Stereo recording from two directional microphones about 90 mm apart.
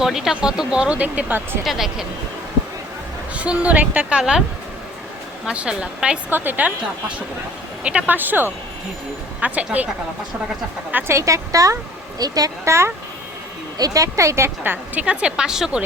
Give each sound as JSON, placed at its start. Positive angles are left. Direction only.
{"t": 0.0, "sound": "speech", "side_deg": -5}
{"t": 1.6, "sound": "speech", "side_deg": -5}
{"t": 3.3, "sound": "speech", "side_deg": -15}
{"t": 5.5, "sound": "speech", "side_deg": -10}
{"t": 6.3, "sound": "a woman's voice", "side_deg": -20}
{"t": 7.9, "sound": "a woman's voice", "side_deg": -15}
{"t": 10.9, "sound": "a woman's voice", "side_deg": -30}
{"t": 12.6, "sound": "a woman's voice", "side_deg": -30}
{"t": 13.7, "sound": "a woman's voice", "side_deg": -40}